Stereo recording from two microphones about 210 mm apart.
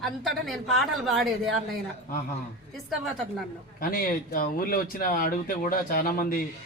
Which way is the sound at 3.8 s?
45° left (ahead or behind).